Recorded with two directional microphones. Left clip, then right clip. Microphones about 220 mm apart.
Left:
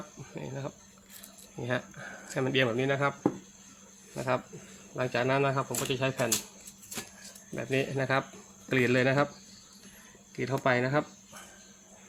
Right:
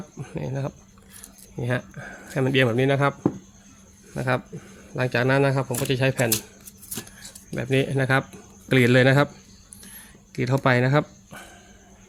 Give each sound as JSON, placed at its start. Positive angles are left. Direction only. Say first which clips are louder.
{"t": 0.2, "sound": "a sound", "louder": "right 9 dB", "side_deg": -35}
{"t": 1.6, "sound": "speech", "louder": "right 5 dB", "side_deg": -25}
{"t": 7.5, "sound": "speech", "louder": "right 7 dB", "side_deg": -40}
{"t": 10.3, "sound": "speech", "louder": "right 6 dB", "side_deg": -50}